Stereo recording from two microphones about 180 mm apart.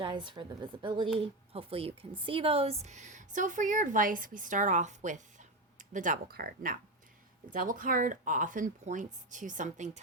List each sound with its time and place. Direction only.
0.0 s a woman's voice: 25° right (ahead or behind); by 10.0 s 40° right (ahead or behind)